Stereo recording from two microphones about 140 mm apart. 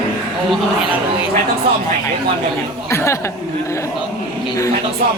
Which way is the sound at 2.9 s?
20° left (ahead or behind).